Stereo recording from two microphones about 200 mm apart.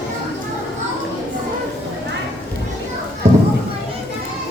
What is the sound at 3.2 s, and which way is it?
Children playing, 35° right (ahead or behind).